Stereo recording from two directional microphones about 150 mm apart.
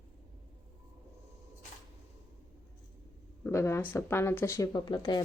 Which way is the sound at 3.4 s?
20° left (ahead or behind).